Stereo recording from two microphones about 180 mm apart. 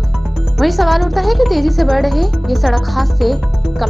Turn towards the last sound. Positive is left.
turn(degrees=0)  # may be behind; listen again after turning